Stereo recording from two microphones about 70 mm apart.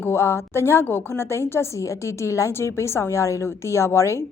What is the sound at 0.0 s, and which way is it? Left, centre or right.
A woman's voice, left.